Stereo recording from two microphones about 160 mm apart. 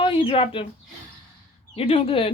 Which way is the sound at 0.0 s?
35° left (ahead or behind).